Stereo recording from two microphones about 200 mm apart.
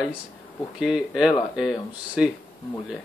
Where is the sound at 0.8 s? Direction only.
5° right (ahead or behind).